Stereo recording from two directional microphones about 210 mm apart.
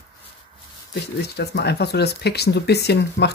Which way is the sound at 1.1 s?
50° left (ahead or behind).